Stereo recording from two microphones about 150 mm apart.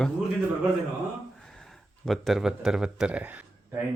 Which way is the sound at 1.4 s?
5° left (ahead or behind).